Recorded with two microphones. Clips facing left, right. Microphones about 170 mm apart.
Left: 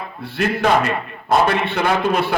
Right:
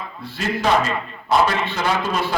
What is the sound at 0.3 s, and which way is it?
A man's voice, 60° left (ahead or behind).